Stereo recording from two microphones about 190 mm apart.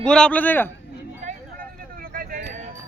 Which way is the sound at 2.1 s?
45° right (ahead or behind).